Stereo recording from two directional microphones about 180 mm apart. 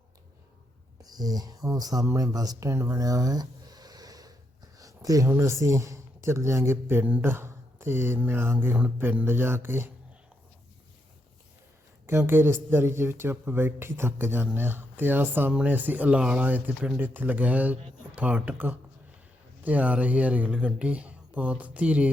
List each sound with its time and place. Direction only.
1.0 s speech: 20° right (ahead or behind)
12.0 s speech: 15° right (ahead or behind)